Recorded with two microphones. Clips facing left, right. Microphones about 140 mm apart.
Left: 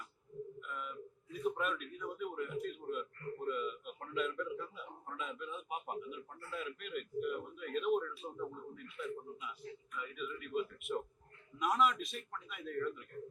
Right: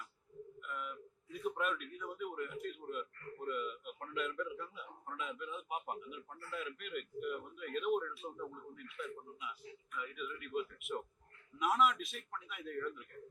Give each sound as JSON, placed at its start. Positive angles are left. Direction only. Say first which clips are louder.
{"t": 0.6, "sound": "a man's voice", "louder": "even", "side_deg": 0}